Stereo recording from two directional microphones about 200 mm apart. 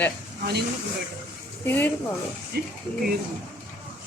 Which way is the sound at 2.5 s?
50° right (ahead or behind).